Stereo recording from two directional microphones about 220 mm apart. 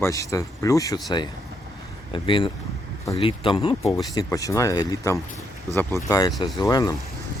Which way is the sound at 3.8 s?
Centre (ahead or behind).